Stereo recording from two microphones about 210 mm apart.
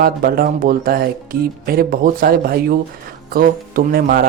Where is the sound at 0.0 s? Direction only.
45° right (ahead or behind).